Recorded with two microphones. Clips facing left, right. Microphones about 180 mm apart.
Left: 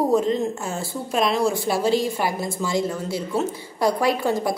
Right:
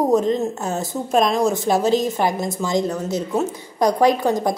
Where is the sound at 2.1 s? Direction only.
20° right (ahead or behind).